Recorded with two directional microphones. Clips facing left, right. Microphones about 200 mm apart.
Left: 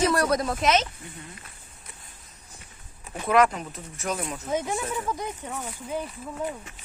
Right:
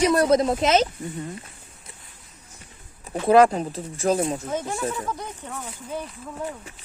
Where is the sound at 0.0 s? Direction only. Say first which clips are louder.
Right 5 dB; 20° right (ahead or behind).